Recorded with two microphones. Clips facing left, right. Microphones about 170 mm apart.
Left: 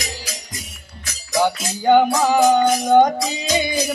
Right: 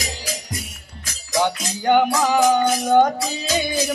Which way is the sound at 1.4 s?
10° left (ahead or behind).